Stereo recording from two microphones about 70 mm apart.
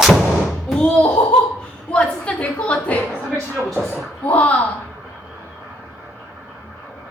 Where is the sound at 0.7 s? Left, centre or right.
Centre.